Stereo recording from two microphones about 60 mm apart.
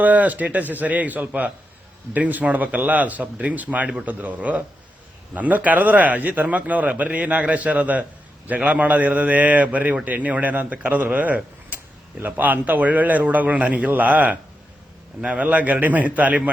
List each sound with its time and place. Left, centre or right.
0.0 s a man's voice: right